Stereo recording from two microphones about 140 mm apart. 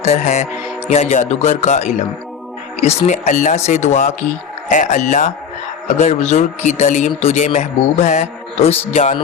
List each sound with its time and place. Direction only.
0.0 s speech: 55° left (ahead or behind)